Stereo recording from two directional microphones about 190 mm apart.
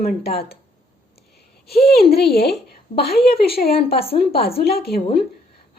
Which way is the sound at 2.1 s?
55° left (ahead or behind).